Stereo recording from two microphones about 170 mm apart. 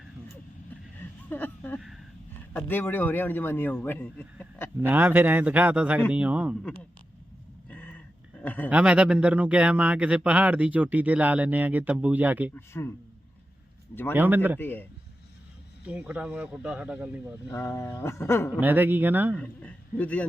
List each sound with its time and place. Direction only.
1.3 s a man's voice: 10° left (ahead or behind)
4.8 s a man's voice: 10° right (ahead or behind)
7.7 s a sound: 10° left (ahead or behind)
8.7 s a man's voice: 5° right (ahead or behind)
12.5 s a man's voice: 15° left (ahead or behind)
14.1 s a man's voice: 10° right (ahead or behind)
14.6 s a man's voice: 10° left (ahead or behind)
15.9 s a man's voice: 5° right (ahead or behind)
17.5 s a man's voice: 15° left (ahead or behind)
18.6 s a man's voice: 10° right (ahead or behind)
19.4 s a man's voice: 10° left (ahead or behind)